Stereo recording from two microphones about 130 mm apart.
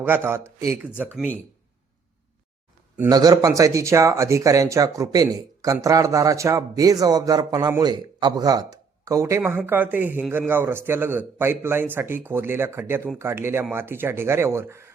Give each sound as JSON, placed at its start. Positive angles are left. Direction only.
{"t": 0.0, "sound": "speech", "side_deg": -15}
{"t": 3.1, "sound": "speech", "side_deg": -25}